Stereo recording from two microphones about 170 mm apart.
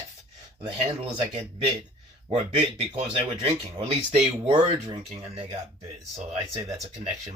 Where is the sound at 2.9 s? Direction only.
35° right (ahead or behind).